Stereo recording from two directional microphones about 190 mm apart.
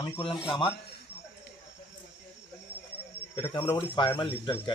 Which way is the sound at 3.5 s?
25° left (ahead or behind).